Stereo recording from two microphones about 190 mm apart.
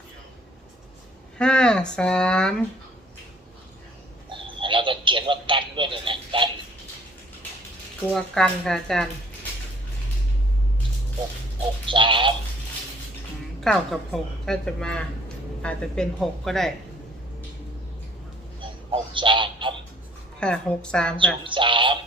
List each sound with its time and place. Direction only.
1.4 s speech: 5° left (ahead or behind)
4.3 s a sound: 25° right (ahead or behind)
8.1 s a woman's voice: 5° left (ahead or behind)
11.9 s speech: 25° right (ahead or behind)
13.6 s a woman's voice: centre (ahead or behind)
18.9 s a sound: 25° right (ahead or behind)
20.4 s a woman's voice: 5° left (ahead or behind)
21.4 s speech: 25° right (ahead or behind)